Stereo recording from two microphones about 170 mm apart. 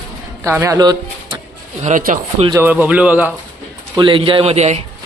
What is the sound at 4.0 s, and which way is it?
Speech, 30° right (ahead or behind).